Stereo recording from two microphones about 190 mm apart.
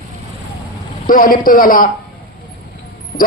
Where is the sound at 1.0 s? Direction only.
45° left (ahead or behind).